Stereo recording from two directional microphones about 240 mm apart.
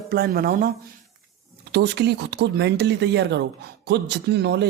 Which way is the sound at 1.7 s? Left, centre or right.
Right.